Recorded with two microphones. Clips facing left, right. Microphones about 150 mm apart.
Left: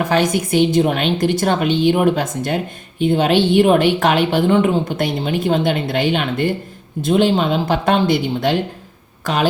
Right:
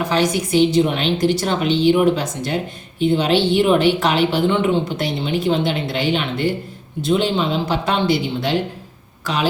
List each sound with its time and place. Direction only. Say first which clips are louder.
0.0 s speech: left 2 dB; 50° left (ahead or behind)